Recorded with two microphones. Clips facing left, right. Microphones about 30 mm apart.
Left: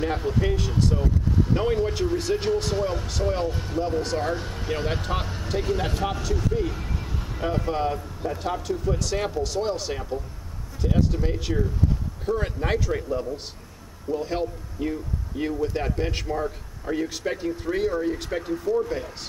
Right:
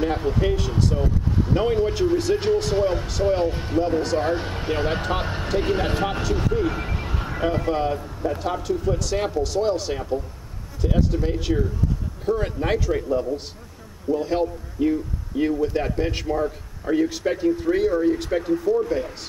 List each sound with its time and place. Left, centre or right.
0.0 s a man's voice: centre
4.4 s speech: right
4.9 s speech: centre
5.2 s speech: right
6.8 s vehicle: right
7.4 s a man's voice: centre